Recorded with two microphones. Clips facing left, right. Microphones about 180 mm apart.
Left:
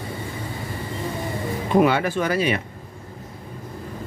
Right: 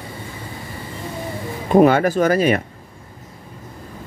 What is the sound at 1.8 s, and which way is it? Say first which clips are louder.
Speech: right 6 dB; 45° right (ahead or behind).